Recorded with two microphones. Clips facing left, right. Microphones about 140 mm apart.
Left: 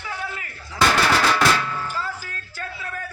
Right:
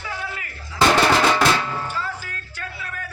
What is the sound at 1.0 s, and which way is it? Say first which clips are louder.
Drum: right 2 dB; 25° right (ahead or behind).